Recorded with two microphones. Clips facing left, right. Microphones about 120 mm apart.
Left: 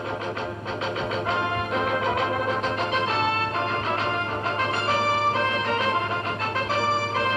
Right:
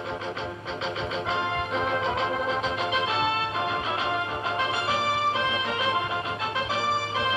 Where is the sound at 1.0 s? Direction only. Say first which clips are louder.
Left 2 dB; 45° left (ahead or behind).